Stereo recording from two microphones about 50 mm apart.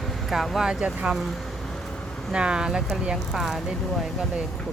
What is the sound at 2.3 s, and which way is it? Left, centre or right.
Speech, centre.